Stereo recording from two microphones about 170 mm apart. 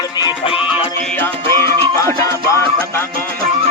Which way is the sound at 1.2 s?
15° left (ahead or behind).